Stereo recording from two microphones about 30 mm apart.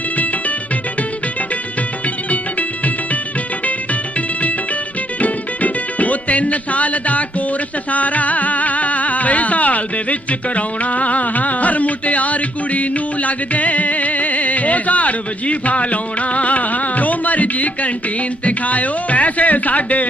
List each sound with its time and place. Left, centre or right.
2.3 s music: left
5.2 s music: left